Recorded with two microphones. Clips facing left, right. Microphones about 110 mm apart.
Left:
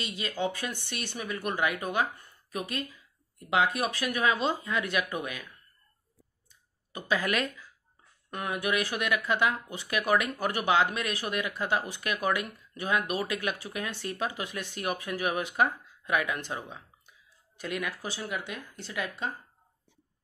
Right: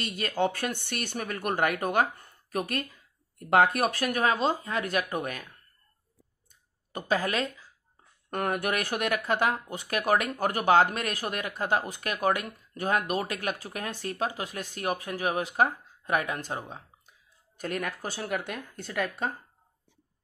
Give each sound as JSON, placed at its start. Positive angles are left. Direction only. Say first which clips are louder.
{"t": 0.0, "sound": "speech", "louder": "right 4 dB", "side_deg": -50}
{"t": 6.5, "sound": "clicking", "louder": "right 4 dB", "side_deg": -45}
{"t": 7.2, "sound": "speech", "louder": "even", "side_deg": -30}
{"t": 8.3, "sound": "speech", "louder": "right 2 dB", "side_deg": -50}